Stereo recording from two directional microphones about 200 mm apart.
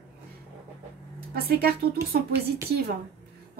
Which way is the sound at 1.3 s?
50° right (ahead or behind).